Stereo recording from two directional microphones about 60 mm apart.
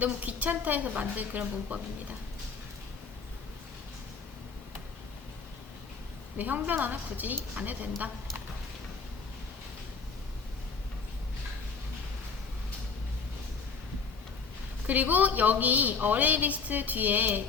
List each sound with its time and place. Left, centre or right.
0.0 s a woman's voice: right
6.3 s a woman's voice: right
14.8 s a woman's voice: right